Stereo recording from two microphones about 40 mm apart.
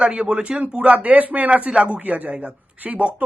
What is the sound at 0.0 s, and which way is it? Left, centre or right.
Speech, right.